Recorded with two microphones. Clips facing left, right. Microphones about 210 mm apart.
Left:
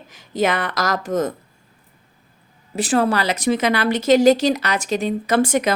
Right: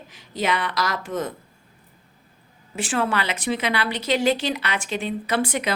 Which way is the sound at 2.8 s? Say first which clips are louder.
Left 6 dB; 40° left (ahead or behind).